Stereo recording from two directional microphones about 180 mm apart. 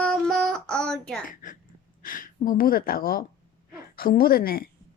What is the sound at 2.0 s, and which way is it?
A woman's voice, 50° left (ahead or behind).